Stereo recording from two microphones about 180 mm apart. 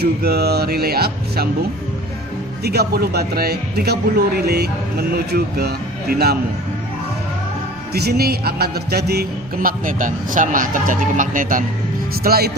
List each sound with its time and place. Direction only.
0.0 s speech: 60° right (ahead or behind)
2.6 s speech: 60° right (ahead or behind)
7.9 s a man's voice: 60° right (ahead or behind)